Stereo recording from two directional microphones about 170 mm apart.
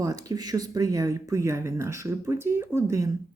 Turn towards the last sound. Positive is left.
turn(degrees=-15)  # may be behind; listen again after turning